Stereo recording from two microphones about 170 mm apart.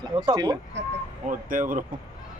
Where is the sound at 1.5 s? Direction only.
50° right (ahead or behind).